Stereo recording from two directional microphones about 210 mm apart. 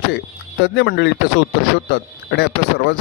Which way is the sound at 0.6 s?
55° left (ahead or behind).